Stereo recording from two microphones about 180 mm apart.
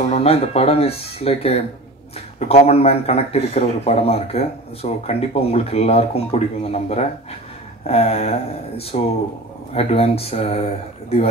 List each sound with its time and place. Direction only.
0.1 s speech: 35° left (ahead or behind)